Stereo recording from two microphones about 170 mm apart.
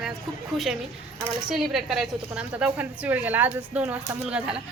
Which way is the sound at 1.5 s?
Centre (ahead or behind).